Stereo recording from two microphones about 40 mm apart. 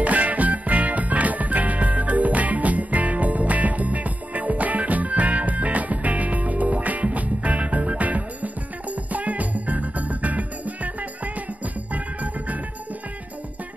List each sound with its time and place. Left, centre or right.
0.0 s music: right